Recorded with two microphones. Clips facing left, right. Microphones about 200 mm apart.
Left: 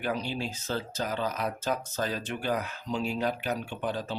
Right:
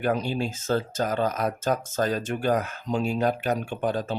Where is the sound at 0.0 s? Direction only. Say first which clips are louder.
Right 6 dB; 50° right (ahead or behind).